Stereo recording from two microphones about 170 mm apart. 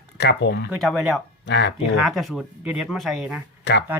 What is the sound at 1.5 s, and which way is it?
Speech, 90° left.